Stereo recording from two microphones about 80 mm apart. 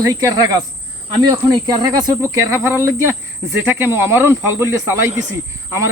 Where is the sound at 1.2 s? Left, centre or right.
Right.